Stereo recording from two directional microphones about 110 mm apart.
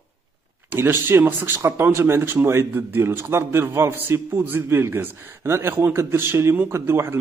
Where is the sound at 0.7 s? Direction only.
20° right (ahead or behind).